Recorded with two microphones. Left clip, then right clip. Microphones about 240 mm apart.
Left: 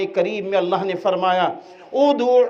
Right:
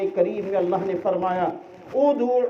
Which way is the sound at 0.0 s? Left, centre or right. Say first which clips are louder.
Left 2 dB; left.